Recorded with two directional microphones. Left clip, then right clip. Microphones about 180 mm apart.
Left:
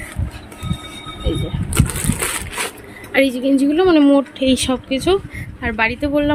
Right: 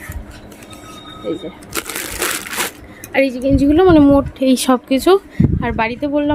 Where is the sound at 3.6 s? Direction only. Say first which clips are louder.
Right 4 dB; 20° right (ahead or behind).